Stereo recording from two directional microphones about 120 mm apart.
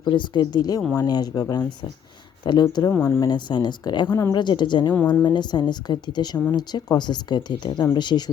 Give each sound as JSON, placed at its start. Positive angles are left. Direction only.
{"t": 0.0, "sound": "speech", "side_deg": 40}
{"t": 2.9, "sound": "speech", "side_deg": 20}
{"t": 3.2, "sound": "speech", "side_deg": 40}
{"t": 4.1, "sound": "speech", "side_deg": 25}
{"t": 4.4, "sound": "speech", "side_deg": 40}